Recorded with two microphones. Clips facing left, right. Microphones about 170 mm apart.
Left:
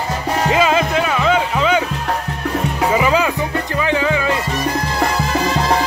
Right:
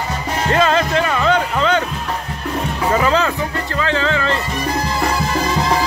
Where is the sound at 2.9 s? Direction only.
10° left (ahead or behind).